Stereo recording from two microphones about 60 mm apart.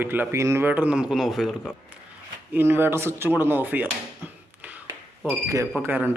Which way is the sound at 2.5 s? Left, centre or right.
Right.